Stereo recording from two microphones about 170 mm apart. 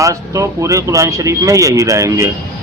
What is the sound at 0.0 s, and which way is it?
A man's voice, 20° right (ahead or behind).